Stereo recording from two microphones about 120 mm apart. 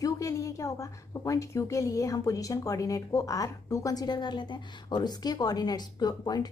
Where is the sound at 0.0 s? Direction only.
25° left (ahead or behind).